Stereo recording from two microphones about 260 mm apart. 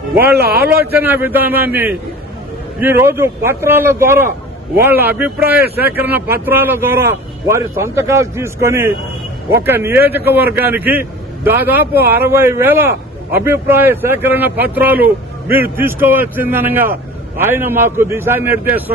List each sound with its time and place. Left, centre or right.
0.3 s speech: right
0.9 s a man's voice: centre